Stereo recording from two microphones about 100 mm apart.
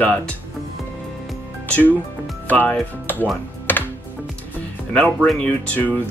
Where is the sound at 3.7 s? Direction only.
20° left (ahead or behind).